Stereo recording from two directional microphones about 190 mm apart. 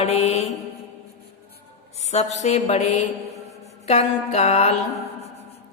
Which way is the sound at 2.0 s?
35° left (ahead or behind).